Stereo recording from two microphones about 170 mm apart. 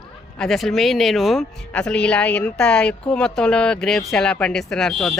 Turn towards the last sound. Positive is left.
turn(degrees=0)  # may be behind; listen again after turning